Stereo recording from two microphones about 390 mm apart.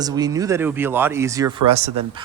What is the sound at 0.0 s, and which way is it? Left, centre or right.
Speech, centre.